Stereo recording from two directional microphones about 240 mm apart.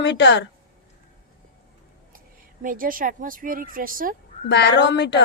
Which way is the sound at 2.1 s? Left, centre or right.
Right.